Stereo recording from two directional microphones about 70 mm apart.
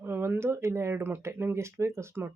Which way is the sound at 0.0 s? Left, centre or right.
Right.